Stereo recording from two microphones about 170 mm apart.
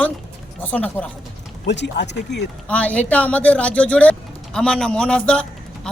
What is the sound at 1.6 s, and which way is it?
Speech, 90° left.